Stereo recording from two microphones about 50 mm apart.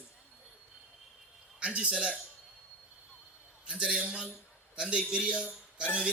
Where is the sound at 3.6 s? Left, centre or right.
Centre.